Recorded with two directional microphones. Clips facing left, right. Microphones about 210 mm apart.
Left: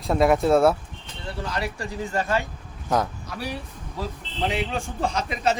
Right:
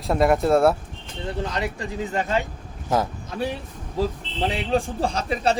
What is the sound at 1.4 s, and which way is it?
A man's voice, 20° right (ahead or behind).